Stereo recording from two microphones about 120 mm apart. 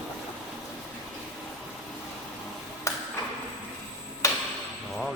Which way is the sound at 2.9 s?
25° left (ahead or behind).